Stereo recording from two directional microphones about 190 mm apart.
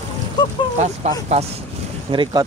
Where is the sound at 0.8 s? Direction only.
35° right (ahead or behind).